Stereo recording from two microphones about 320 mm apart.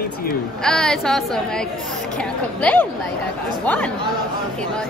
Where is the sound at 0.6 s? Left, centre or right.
Centre.